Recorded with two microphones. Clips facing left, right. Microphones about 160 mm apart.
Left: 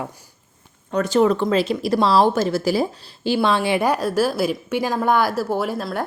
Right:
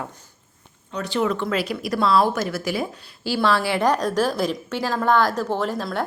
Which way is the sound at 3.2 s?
20° left (ahead or behind).